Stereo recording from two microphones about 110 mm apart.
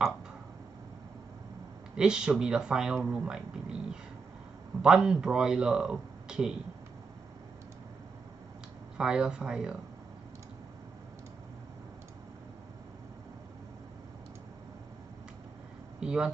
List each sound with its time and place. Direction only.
2.0 s speech: 5° right (ahead or behind)
8.9 s speech: 5° right (ahead or behind)
16.0 s speech: 5° right (ahead or behind)